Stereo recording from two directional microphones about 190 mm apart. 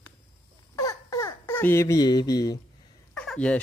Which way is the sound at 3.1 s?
5° left (ahead or behind).